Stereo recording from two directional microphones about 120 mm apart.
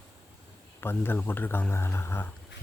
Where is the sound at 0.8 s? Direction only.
20° left (ahead or behind).